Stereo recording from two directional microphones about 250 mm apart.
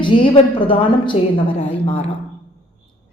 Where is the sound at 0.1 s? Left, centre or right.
Left.